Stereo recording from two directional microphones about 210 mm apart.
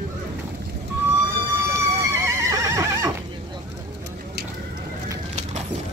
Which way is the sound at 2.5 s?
15° right (ahead or behind).